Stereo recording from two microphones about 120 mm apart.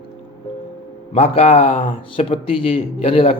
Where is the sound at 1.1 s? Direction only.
65° left (ahead or behind).